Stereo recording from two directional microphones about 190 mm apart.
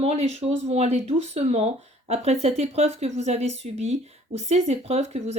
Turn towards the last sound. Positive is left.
turn(degrees=-35)  # may be behind; listen again after turning